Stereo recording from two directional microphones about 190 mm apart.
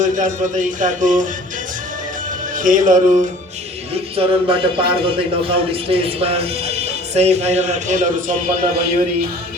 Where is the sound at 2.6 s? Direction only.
45° right (ahead or behind).